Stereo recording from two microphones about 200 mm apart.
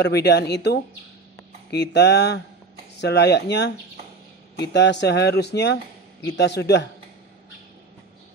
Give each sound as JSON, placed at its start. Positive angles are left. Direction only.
{"t": 0.0, "sound": "speech", "side_deg": 55}